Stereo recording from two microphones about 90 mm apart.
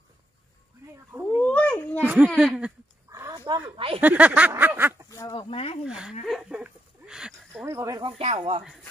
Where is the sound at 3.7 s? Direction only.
90° right.